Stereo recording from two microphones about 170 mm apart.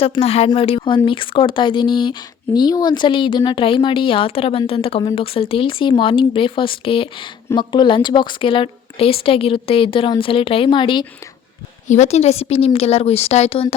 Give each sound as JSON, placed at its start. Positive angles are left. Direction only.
{"t": 0.0, "sound": "speech", "side_deg": 35}
{"t": 11.9, "sound": "speech", "side_deg": 40}